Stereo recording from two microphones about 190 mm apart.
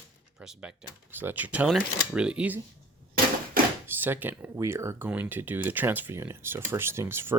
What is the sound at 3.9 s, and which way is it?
Speech, 10° right (ahead or behind).